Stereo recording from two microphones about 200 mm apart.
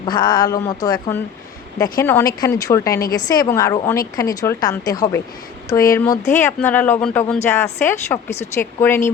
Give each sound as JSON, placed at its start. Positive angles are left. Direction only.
{"t": 0.0, "sound": "speech", "side_deg": 20}